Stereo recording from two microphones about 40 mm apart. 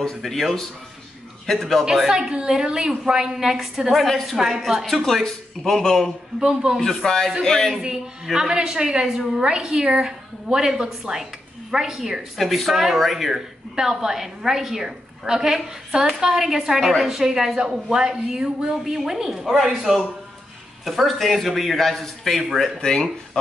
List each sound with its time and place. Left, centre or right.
0.2 s a man's voice: centre
2.0 s a woman's voice: centre
4.9 s speech: centre
6.4 s a woman's voice: centre
6.8 s speech: centre
7.8 s a woman's voice: centre
12.4 s a man's voice: centre
22.8 s speech: left